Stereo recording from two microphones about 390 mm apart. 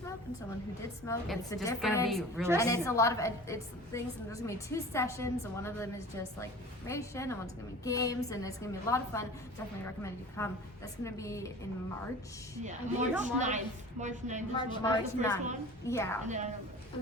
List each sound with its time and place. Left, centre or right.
1.0 s a woman's voice: centre
2.6 s a woman's voice: centre
12.6 s a woman's voice: centre
14.5 s a woman's voice: centre
16.2 s a woman's voice: centre